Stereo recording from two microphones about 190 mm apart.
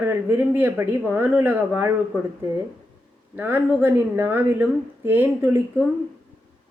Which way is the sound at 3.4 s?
10° right (ahead or behind).